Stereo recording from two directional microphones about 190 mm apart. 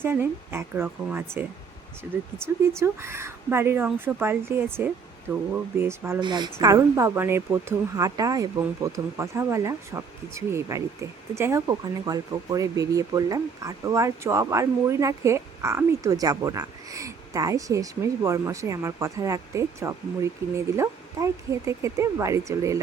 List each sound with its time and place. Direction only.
0.0 s speech: 10° right (ahead or behind)
2.7 s speech: 15° right (ahead or behind)
6.1 s a woman's voice: 25° right (ahead or behind)